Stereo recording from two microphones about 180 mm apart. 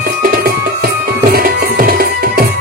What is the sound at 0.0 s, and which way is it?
Music, 55° right (ahead or behind).